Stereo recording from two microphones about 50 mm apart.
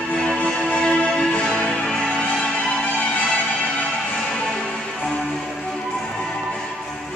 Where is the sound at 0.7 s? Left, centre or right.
Centre.